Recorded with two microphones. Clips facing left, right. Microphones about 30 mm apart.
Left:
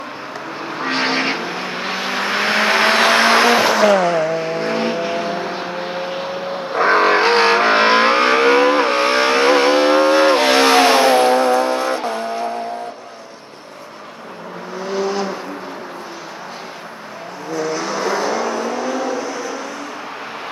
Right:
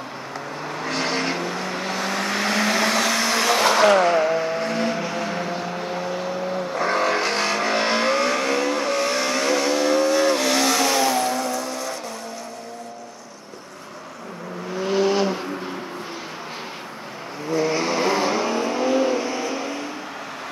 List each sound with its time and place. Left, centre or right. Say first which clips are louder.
0.7 s vehicle: left 6 dB; left
3.7 s vehicle: left 2 dB; centre
4.4 s vehicle: left 3 dB; left
17.6 s vehicle: left 2 dB; right